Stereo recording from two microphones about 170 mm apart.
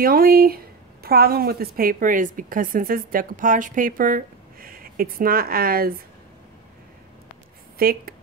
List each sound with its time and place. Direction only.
0.0 s a woman's voice: 60° right (ahead or behind)
7.8 s a woman's voice: 60° right (ahead or behind)